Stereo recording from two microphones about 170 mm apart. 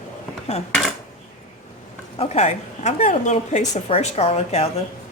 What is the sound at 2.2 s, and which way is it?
A woman's voice, 40° left (ahead or behind).